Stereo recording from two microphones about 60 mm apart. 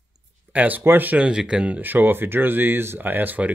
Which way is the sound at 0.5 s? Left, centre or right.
Right.